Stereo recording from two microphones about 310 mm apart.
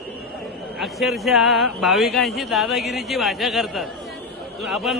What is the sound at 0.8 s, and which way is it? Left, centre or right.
Speech, centre.